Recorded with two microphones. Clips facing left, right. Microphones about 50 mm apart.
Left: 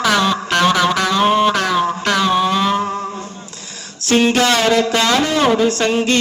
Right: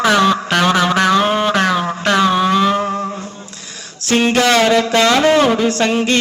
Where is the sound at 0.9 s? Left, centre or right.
Right.